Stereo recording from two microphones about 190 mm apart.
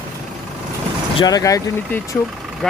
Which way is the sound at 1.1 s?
20° left (ahead or behind).